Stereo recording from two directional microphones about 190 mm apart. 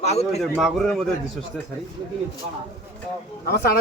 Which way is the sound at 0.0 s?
35° left (ahead or behind).